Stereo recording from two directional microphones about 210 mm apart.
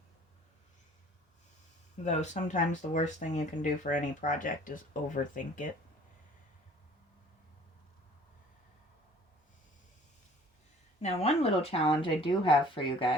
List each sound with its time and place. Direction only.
2.0 s speech: 35° left (ahead or behind)
11.0 s speech: 30° left (ahead or behind)